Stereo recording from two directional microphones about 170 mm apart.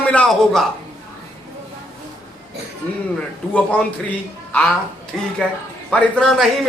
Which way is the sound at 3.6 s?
10° left (ahead or behind).